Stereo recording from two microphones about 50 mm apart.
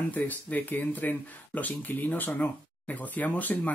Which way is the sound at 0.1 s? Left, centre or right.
Left.